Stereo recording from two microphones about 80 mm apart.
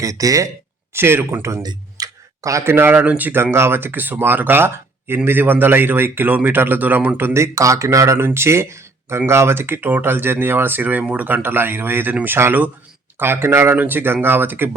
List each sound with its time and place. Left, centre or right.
0.0 s speech: right
0.9 s speech: right
1.6 s clicking: right
3.0 s speech: centre
7.3 s speech: right